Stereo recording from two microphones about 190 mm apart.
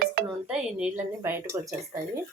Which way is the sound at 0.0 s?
50° right (ahead or behind).